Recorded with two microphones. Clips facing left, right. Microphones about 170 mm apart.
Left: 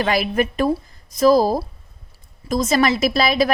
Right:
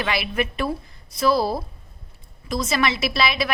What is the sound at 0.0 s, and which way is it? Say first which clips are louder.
A woman's voice: left 5 dB; 40° left (ahead or behind).